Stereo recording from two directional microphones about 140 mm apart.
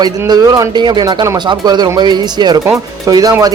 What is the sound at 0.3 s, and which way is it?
Speech, 25° right (ahead or behind).